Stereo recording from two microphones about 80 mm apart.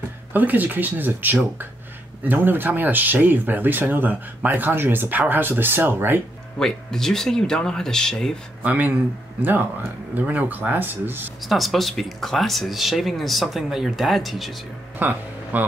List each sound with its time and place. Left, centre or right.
0.3 s speech: right
6.6 s speech: centre
8.6 s speech: right
11.4 s speech: centre
15.0 s speech: right